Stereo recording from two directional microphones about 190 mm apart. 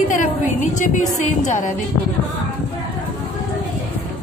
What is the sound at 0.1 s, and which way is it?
A woman's voice, 45° left (ahead or behind).